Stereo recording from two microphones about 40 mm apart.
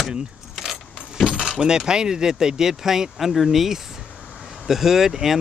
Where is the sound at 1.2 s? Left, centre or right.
Centre.